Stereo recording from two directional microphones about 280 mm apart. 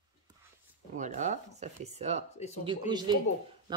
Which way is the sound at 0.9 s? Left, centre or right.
Right.